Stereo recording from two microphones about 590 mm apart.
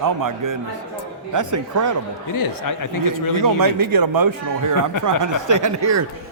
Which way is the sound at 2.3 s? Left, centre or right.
Left.